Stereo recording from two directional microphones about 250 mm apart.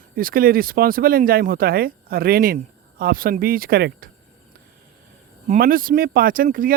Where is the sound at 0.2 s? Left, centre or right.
Right.